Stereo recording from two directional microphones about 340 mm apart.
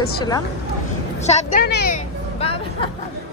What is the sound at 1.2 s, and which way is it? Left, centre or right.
Speech, left.